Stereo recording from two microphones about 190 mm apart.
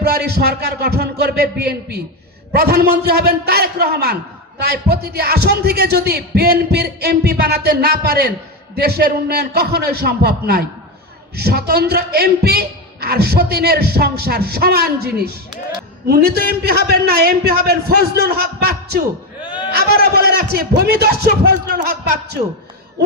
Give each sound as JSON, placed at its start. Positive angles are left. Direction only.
{"t": 0.0, "sound": "speech", "side_deg": -55}
{"t": 19.4, "sound": "a sound", "side_deg": 25}
{"t": 19.7, "sound": "speech", "side_deg": -55}